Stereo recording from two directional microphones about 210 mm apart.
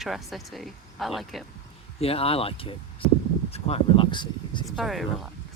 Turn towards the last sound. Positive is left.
turn(degrees=0)  # may be behind; listen again after turning